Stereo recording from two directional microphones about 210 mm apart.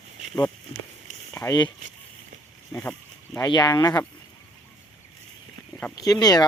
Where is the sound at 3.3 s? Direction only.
15° left (ahead or behind).